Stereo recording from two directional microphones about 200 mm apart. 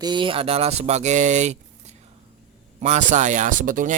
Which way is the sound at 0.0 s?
25° right (ahead or behind).